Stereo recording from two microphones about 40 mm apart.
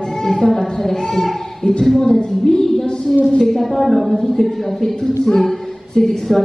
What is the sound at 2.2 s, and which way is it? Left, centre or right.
Speech, centre.